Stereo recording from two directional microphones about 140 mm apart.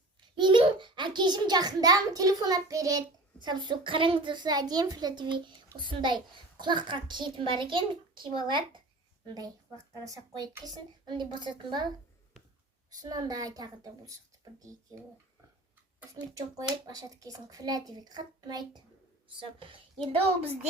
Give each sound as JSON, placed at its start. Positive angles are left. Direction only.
{"t": 0.3, "sound": "a child's voice", "side_deg": -35}
{"t": 13.0, "sound": "a child's voice", "side_deg": -30}
{"t": 16.3, "sound": "a child's voice", "side_deg": -25}